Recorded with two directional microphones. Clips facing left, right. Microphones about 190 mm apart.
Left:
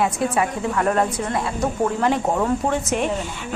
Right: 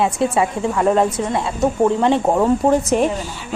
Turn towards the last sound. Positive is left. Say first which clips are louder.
# right 6 dB
turn(degrees=-35)  # may be behind; listen again after turning